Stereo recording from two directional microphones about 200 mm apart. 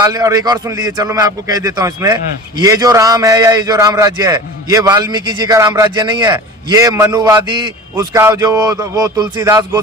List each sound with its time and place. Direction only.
0.0 s a man's voice: 20° right (ahead or behind)